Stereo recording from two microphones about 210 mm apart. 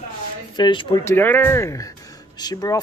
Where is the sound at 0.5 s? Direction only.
20° left (ahead or behind).